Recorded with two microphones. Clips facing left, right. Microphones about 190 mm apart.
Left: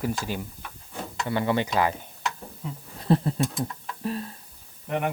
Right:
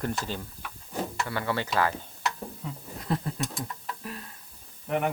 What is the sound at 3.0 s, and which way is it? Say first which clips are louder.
Speech: left 8 dB; 30° left (ahead or behind).